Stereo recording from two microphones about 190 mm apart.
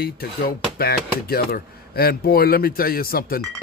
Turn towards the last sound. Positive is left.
turn(degrees=50)  # may be behind; listen again after turning